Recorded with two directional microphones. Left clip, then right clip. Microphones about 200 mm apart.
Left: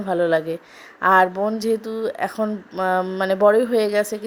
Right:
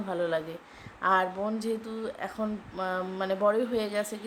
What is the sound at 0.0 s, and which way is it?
A woman's voice, 35° left (ahead or behind).